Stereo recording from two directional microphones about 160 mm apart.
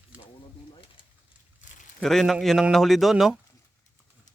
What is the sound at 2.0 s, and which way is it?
Speech, centre (ahead or behind).